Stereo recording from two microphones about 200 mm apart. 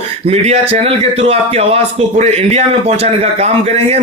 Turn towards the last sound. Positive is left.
turn(degrees=-30)  # may be behind; listen again after turning